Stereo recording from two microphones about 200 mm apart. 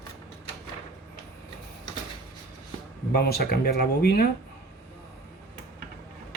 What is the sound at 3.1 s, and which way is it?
Speech, 50° left (ahead or behind).